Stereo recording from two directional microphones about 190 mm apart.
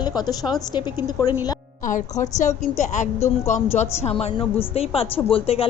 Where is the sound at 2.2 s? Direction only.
40° left (ahead or behind).